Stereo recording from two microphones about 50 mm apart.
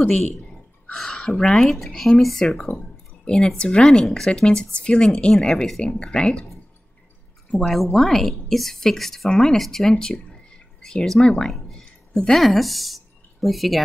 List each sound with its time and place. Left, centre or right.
0.9 s speech: centre
7.5 s a woman's voice: centre